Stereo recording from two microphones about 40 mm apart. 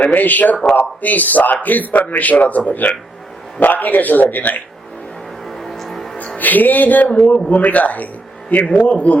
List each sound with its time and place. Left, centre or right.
0.0 s a man's voice: left
5.5 s a sound: centre
6.4 s a man's voice: left